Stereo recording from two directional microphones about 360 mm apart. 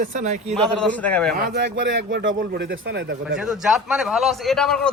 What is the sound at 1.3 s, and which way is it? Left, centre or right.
A man's voice, right.